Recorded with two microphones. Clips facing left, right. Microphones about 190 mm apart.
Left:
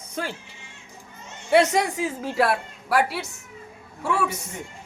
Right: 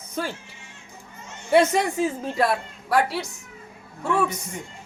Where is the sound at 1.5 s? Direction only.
90° left.